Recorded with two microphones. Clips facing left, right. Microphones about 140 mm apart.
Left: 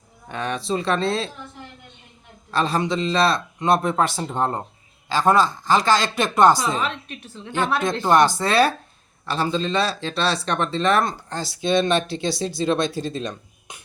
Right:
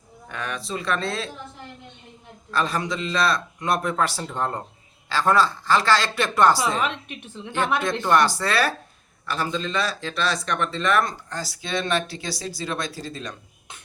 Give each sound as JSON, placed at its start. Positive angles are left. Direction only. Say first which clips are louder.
{"t": 0.3, "sound": "speech", "louder": "left 6 dB", "side_deg": 25}
{"t": 2.5, "sound": "speech", "louder": "left 3 dB", "side_deg": 25}
{"t": 8.0, "sound": "speech", "louder": "left 4 dB", "side_deg": 20}